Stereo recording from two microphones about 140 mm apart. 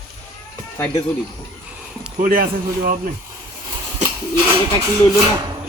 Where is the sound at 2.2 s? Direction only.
90° right.